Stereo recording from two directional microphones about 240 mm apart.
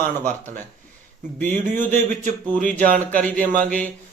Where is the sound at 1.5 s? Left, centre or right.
Right.